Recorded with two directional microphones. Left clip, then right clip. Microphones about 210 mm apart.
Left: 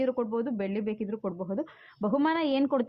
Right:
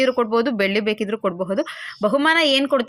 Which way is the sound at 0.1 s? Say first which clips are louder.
Right 11 dB; 30° right (ahead or behind).